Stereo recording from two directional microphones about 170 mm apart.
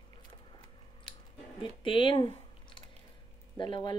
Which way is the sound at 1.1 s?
30° left (ahead or behind).